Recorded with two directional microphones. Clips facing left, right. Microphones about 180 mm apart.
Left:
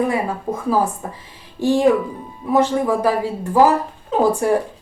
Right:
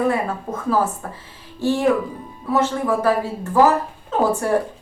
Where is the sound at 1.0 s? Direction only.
15° left (ahead or behind).